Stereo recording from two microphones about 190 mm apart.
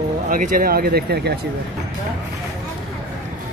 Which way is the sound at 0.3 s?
45° right (ahead or behind).